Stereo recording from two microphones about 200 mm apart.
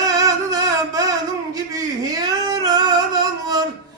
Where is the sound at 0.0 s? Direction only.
20° right (ahead or behind).